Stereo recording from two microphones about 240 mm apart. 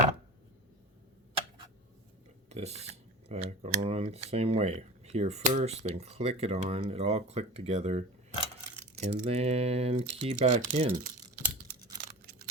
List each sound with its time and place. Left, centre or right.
2.5 s speech: right